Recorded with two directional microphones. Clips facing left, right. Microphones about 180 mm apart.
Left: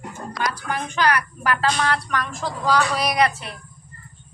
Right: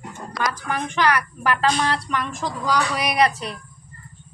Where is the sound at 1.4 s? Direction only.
25° right (ahead or behind).